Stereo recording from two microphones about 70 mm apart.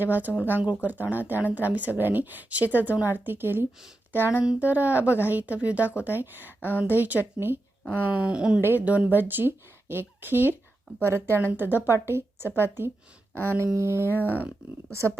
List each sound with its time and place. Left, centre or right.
0.0 s a woman's voice: right
6.6 s a woman's voice: left
7.3 s a woman's voice: right
8.2 s speech: centre
8.6 s a woman's voice: right
14.1 s a sound: left